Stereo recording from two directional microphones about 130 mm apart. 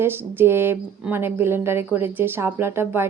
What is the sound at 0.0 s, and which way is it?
A woman's voice, 20° right (ahead or behind).